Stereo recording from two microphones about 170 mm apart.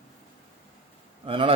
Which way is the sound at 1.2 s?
30° right (ahead or behind).